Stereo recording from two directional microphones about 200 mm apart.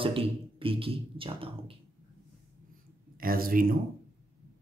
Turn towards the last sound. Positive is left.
turn(degrees=-45)  # may be behind; listen again after turning